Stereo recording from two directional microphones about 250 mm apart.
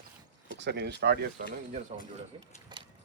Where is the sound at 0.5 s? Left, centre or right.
Right.